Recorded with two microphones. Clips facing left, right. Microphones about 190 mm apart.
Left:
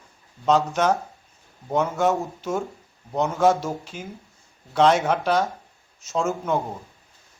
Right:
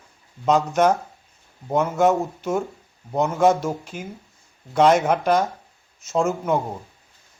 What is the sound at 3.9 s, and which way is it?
Speech, 55° right (ahead or behind).